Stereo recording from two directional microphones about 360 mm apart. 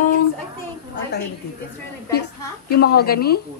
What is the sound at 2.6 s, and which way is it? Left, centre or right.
Speech, left.